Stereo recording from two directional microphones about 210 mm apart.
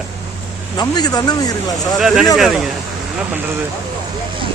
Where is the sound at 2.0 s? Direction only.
Centre (ahead or behind).